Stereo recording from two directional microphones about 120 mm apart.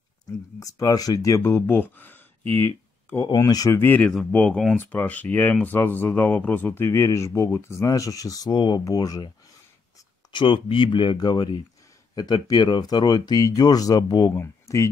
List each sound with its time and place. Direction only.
0.6 s speech: 30° left (ahead or behind)
2.4 s speech: 50° right (ahead or behind)
3.3 s speech: 30° left (ahead or behind)
3.7 s speech: 15° left (ahead or behind)
4.0 s speech: 5° left (ahead or behind); by 9.3 s 30° left (ahead or behind)
10.3 s speech: 45° left (ahead or behind)
14.3 s speech: 25° left (ahead or behind)